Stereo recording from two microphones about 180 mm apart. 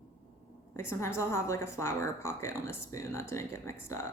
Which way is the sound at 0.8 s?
15° left (ahead or behind).